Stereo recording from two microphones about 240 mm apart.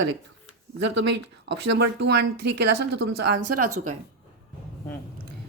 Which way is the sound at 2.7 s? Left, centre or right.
Right.